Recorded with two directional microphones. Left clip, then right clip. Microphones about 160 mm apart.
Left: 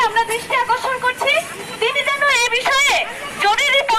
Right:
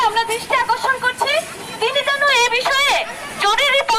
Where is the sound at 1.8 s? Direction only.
10° right (ahead or behind).